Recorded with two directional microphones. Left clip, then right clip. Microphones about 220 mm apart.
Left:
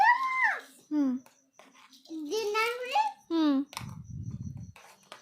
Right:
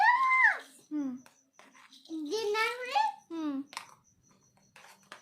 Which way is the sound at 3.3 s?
35° left (ahead or behind).